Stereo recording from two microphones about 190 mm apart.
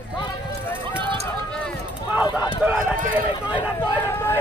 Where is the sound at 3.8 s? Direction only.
10° left (ahead or behind).